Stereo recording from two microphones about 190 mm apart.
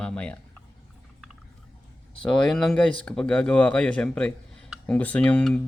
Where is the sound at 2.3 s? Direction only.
Centre (ahead or behind).